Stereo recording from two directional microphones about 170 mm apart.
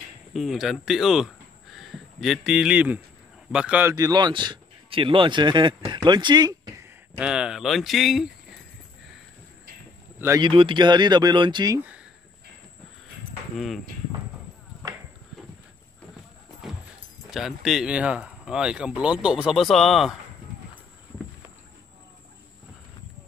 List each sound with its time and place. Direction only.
0.3 s speech: centre (ahead or behind)
3.9 s speech: 25° right (ahead or behind)
7.2 s speech: 5° right (ahead or behind)
10.4 s speech: 30° right (ahead or behind)
16.6 s music: 5° right (ahead or behind)
17.3 s speech: 5° right (ahead or behind)